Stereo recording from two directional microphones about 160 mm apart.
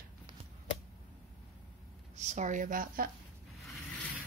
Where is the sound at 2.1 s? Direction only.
45° right (ahead or behind).